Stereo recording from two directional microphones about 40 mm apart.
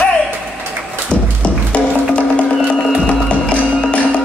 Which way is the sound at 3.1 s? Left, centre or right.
Left.